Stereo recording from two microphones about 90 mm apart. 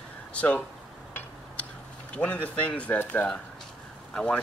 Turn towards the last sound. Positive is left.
turn(degrees=10)  # may be behind; listen again after turning